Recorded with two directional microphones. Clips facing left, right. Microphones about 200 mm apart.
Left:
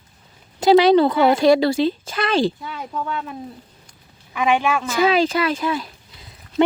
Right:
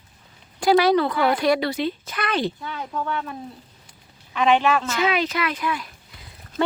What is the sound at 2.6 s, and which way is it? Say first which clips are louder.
Speech: left 1 dB; 10° left (ahead or behind).